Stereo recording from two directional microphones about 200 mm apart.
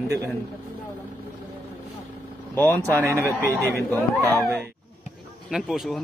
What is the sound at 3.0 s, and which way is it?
Speech, 15° right (ahead or behind).